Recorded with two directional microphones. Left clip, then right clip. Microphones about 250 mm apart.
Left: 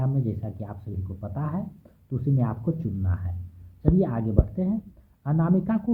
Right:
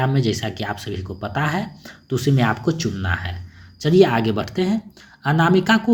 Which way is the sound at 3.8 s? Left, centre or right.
Right.